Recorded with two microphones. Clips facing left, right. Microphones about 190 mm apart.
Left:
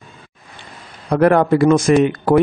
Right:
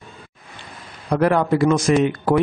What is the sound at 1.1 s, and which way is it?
Speech, 55° left (ahead or behind).